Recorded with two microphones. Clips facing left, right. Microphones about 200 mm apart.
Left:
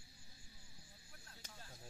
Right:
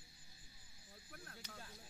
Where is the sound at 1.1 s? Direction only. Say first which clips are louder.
Right 9 dB; 55° right (ahead or behind).